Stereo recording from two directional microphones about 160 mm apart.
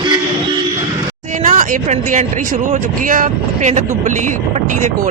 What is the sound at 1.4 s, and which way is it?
Speech, 50° right (ahead or behind).